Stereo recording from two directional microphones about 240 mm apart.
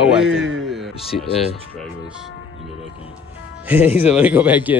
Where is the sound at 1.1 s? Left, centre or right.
Left.